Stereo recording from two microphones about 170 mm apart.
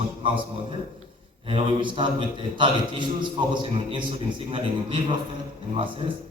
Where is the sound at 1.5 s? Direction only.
30° right (ahead or behind).